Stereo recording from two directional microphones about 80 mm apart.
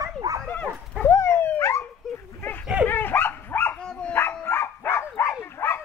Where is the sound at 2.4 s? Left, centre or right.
Left.